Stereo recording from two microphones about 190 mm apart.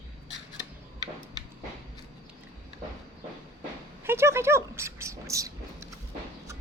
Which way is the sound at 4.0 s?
10° right (ahead or behind).